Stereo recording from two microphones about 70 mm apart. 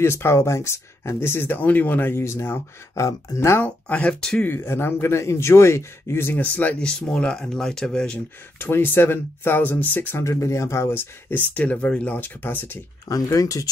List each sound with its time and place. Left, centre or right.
0.0 s speech: left
3.6 s speech: centre
4.5 s speech: left
6.9 s speech: centre
8.5 s speech: left
10.2 s speech: left
11.5 s speech: centre
13.1 s speech: left